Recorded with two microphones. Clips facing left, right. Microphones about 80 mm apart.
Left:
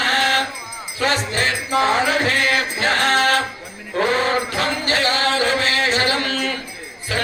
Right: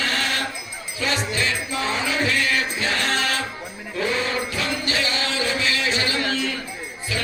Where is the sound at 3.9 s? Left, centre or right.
Left.